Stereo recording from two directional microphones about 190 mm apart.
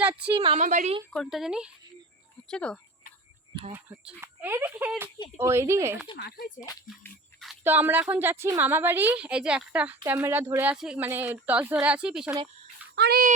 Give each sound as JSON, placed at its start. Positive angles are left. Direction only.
{"t": 0.0, "sound": "a woman's voice", "side_deg": -5}
{"t": 0.3, "sound": "a woman's voice", "side_deg": -35}
{"t": 1.1, "sound": "speech", "side_deg": 0}
{"t": 3.7, "sound": "a woman's voice", "side_deg": -10}
{"t": 6.1, "sound": "speech", "side_deg": 55}
{"t": 6.6, "sound": "speech", "side_deg": 20}
{"t": 7.6, "sound": "a woman's voice", "side_deg": -10}
{"t": 13.0, "sound": "speech", "side_deg": -55}